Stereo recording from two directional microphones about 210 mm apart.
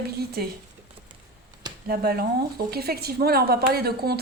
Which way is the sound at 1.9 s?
50° right (ahead or behind).